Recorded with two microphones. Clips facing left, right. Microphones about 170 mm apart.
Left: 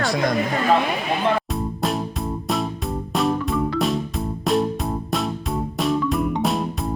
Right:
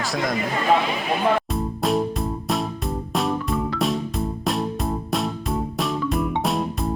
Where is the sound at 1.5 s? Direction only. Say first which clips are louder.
Right 2 dB; centre (ahead or behind).